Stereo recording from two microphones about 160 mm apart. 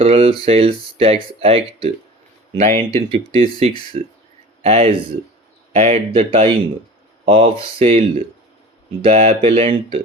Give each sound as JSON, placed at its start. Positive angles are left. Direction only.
{"t": 0.0, "sound": "speech", "side_deg": -40}
{"t": 3.1, "sound": "speech", "side_deg": -35}